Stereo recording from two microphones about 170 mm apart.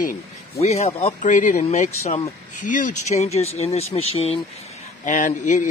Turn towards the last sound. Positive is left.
turn(degrees=50)  # may be behind; listen again after turning